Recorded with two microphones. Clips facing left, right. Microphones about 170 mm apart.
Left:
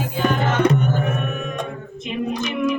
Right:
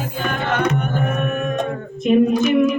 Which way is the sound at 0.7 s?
55° right (ahead or behind).